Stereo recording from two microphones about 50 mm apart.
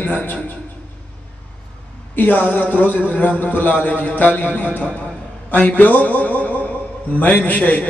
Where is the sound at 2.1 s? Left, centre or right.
Left.